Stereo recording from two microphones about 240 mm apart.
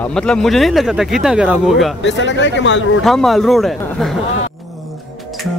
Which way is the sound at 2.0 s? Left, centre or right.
Left.